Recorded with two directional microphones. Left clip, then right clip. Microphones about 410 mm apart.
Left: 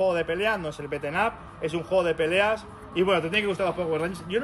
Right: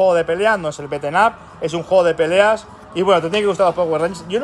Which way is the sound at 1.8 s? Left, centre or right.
Right.